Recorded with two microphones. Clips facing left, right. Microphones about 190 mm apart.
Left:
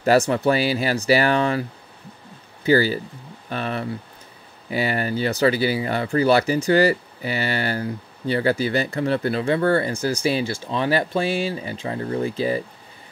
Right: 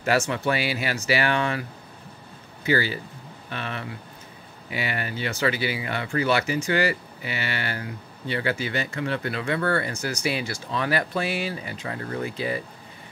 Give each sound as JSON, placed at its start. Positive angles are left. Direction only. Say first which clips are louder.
{"t": 0.0, "sound": "speech", "louder": "left 6 dB", "side_deg": 35}